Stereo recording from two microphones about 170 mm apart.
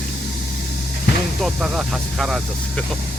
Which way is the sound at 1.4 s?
5° right (ahead or behind).